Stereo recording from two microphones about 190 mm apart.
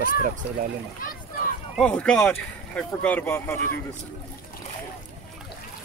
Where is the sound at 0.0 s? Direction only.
45° right (ahead or behind).